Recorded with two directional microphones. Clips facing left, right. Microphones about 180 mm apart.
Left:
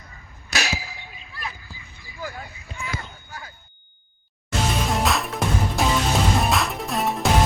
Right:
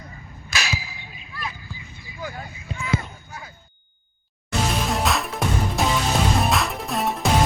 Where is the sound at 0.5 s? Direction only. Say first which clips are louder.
Left 1 dB; 50° left (ahead or behind).